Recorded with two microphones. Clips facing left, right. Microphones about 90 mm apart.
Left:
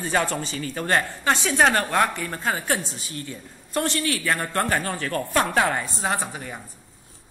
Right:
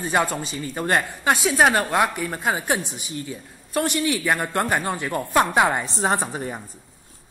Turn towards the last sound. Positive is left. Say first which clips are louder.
# right 4 dB
turn(degrees=-30)  # may be behind; listen again after turning